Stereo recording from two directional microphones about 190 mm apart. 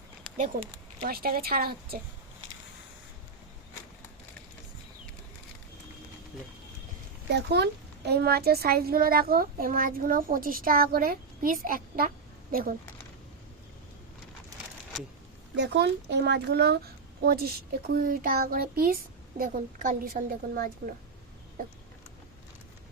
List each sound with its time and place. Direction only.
0.3 s speech: 35° right (ahead or behind)
1.0 s a child's voice: 50° right (ahead or behind)
7.3 s a child's voice: 65° right (ahead or behind)
15.5 s a child's voice: 65° right (ahead or behind); by 20.9 s 50° right (ahead or behind)